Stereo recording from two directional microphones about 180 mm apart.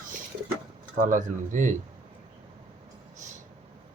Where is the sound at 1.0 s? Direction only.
45° right (ahead or behind).